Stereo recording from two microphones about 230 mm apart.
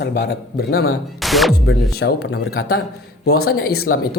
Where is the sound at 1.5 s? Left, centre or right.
Left.